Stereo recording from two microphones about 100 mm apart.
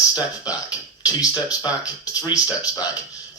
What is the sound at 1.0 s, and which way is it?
A woman's voice, 40° left (ahead or behind).